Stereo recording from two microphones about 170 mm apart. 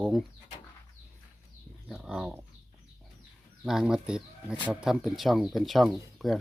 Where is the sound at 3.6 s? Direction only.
5° right (ahead or behind).